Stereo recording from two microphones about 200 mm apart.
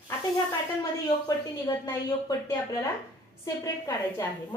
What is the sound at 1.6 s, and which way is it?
Speech, 20° left (ahead or behind).